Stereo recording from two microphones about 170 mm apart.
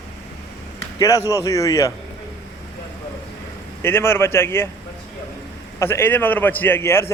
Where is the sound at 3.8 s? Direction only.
15° left (ahead or behind).